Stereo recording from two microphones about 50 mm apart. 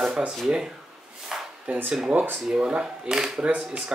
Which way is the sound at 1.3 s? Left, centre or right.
Centre.